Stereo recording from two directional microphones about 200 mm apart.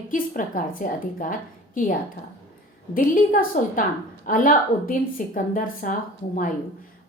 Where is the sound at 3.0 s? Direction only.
45° left (ahead or behind).